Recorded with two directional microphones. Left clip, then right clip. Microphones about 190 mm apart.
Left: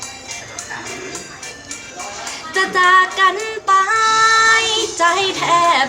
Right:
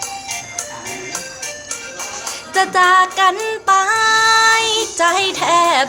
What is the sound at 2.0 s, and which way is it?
Music, 40° right (ahead or behind).